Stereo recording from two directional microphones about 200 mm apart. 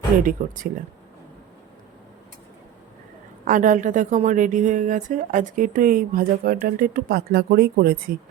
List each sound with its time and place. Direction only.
0.2 s a woman's voice: 40° right (ahead or behind)
3.4 s a woman's voice: 40° right (ahead or behind)